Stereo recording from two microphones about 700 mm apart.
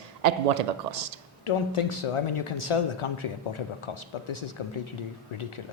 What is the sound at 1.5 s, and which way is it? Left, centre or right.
Speech, left.